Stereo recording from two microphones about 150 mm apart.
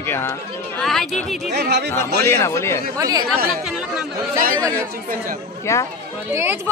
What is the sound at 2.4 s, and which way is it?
Speech, 15° left (ahead or behind).